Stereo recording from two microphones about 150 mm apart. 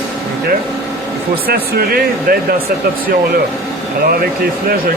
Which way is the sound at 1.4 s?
90° right.